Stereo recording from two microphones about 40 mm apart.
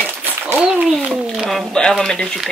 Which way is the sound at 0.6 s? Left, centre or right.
Right.